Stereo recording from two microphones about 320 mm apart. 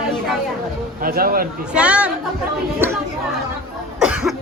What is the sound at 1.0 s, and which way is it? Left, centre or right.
Speech, right.